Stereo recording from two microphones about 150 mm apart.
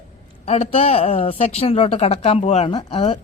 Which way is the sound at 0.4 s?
45° left (ahead or behind).